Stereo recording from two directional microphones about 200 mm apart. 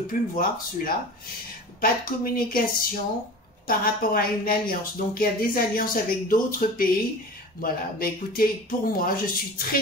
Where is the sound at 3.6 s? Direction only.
45° left (ahead or behind).